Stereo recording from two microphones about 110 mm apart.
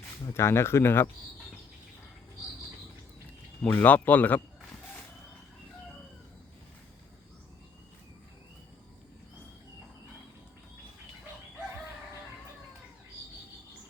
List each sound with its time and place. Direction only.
0.3 s speech: 25° left (ahead or behind)
3.6 s speech: 15° left (ahead or behind)